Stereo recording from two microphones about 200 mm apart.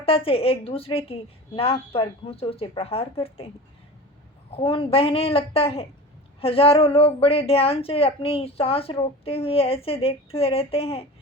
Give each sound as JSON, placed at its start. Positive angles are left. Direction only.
{"t": 0.0, "sound": "a woman's voice", "side_deg": 30}
{"t": 4.5, "sound": "a woman's voice", "side_deg": 25}